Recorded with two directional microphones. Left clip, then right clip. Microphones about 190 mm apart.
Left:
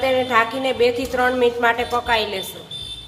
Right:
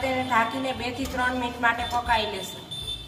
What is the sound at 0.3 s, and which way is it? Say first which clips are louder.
A woman's voice: left 7 dB; 55° left (ahead or behind).